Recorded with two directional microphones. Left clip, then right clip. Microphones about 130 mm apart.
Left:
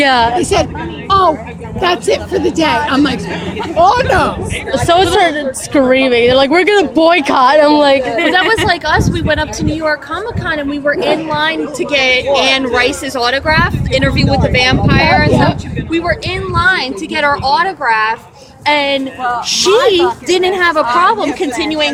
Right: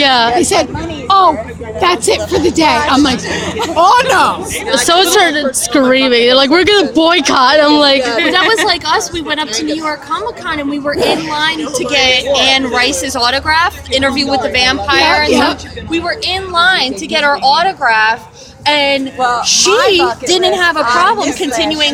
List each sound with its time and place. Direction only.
0.0 s a woman's voice: 35° right (ahead or behind); by 3.2 s 55° right (ahead or behind)
3.8 s speech: 90° right; by 4.4 s 70° right (ahead or behind)
4.7 s speech: 30° right (ahead or behind)
8.6 s a woman's voice: 10° left (ahead or behind); by 18.2 s 15° right (ahead or behind)
18.6 s speech: centre (ahead or behind)